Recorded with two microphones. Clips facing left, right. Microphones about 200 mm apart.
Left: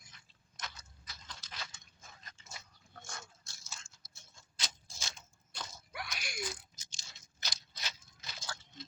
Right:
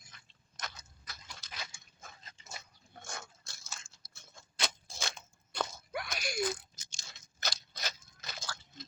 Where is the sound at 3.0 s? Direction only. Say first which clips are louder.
Right 5 dB; 55° right (ahead or behind); by 6.4 s 40° right (ahead or behind).